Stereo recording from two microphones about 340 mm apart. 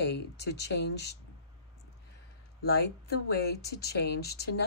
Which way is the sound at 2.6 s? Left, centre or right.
Left.